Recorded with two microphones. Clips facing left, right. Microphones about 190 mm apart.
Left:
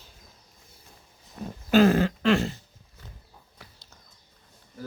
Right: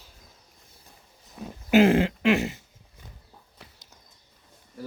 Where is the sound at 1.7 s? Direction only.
25° right (ahead or behind).